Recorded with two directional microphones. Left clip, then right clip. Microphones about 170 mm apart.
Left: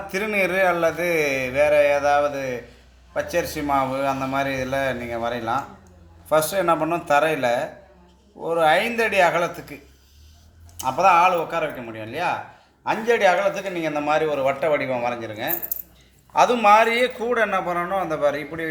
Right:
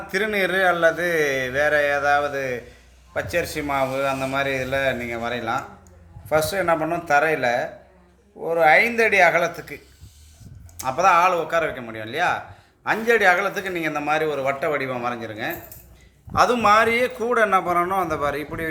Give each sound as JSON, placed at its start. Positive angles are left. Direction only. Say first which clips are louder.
{"t": 0.1, "sound": "a man's voice", "louder": "right 1 dB", "side_deg": -15}
{"t": 8.4, "sound": "a man's voice", "louder": "right 2 dB", "side_deg": -15}
{"t": 9.4, "sound": "speech", "louder": "right 1 dB", "side_deg": 45}
{"t": 10.8, "sound": "speech", "louder": "left 1 dB", "side_deg": -25}